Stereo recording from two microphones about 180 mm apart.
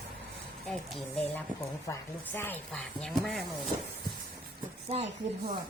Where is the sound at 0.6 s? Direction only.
Centre (ahead or behind).